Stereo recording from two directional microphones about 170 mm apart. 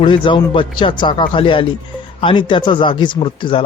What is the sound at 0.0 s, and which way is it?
A woman's voice, 30° left (ahead or behind).